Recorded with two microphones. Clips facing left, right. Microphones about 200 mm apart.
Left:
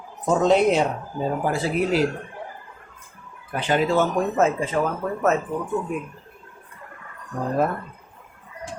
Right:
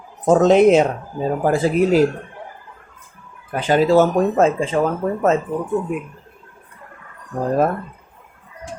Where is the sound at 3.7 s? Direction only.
40° right (ahead or behind).